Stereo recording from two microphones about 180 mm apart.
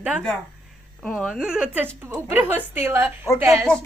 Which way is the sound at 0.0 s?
5° right (ahead or behind).